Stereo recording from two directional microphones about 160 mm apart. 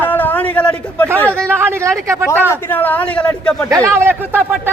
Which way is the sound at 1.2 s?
10° left (ahead or behind).